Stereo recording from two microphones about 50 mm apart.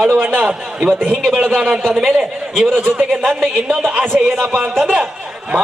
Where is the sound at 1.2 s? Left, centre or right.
Centre.